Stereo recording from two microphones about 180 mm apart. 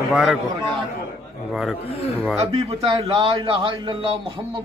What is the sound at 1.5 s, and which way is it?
Speech, 5° right (ahead or behind).